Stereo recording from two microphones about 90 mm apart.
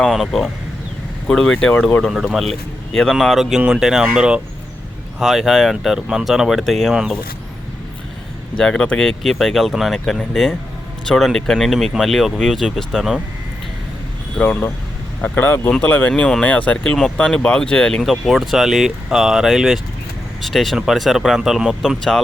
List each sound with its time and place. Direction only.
0.1 s speech: centre (ahead or behind)
8.5 s speech: 10° left (ahead or behind)
14.3 s speech: 15° left (ahead or behind)